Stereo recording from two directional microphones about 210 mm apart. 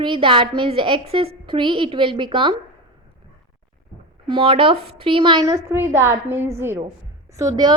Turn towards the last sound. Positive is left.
turn(degrees=-15)  # may be behind; listen again after turning